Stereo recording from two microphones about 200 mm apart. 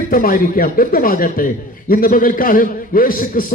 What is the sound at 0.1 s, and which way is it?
A man's voice, 45° left (ahead or behind).